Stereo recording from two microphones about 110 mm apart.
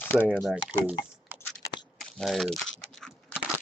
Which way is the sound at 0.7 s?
15° right (ahead or behind).